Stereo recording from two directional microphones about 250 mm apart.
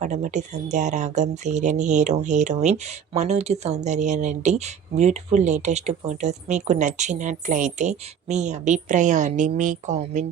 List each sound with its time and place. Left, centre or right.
0.0 s speech: right